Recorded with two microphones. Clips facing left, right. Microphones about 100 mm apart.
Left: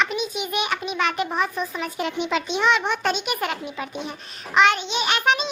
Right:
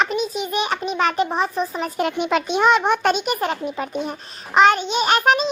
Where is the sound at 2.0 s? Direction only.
50° right (ahead or behind).